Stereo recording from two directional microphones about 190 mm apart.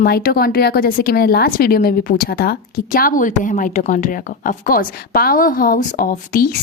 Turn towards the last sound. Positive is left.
turn(degrees=50)  # may be behind; listen again after turning